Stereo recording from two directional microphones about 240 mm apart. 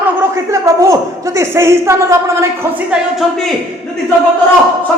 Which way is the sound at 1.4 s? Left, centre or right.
Centre.